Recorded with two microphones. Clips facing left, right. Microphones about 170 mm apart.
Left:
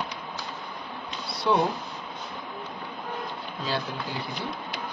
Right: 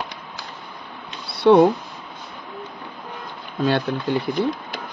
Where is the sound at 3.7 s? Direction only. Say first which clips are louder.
Right 10 dB; 65° right (ahead or behind).